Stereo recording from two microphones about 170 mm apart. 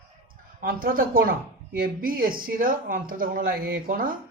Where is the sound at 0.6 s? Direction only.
60° right (ahead or behind).